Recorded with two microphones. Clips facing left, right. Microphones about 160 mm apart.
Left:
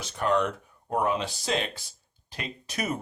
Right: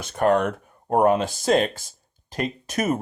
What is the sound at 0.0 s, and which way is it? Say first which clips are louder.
Speech: right 6 dB; 50° right (ahead or behind).